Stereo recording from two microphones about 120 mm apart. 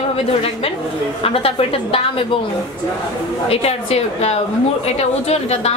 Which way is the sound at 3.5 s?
55° left (ahead or behind).